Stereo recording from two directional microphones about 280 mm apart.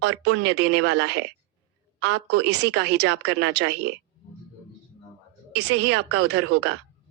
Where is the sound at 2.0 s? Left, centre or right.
Right.